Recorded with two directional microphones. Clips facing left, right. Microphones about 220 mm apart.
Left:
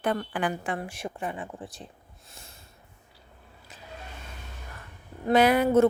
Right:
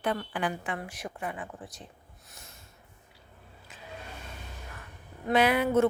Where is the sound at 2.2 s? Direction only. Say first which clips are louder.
Left 2 dB; 30° left (ahead or behind).